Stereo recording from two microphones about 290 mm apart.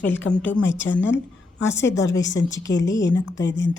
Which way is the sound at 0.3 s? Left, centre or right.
Centre.